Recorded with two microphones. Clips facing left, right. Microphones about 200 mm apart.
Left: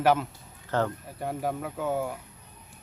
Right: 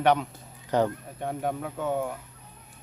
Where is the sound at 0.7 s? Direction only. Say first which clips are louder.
Right 3 dB; 15° right (ahead or behind).